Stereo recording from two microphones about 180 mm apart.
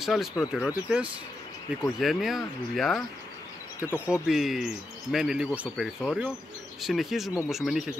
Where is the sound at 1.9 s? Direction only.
Centre (ahead or behind).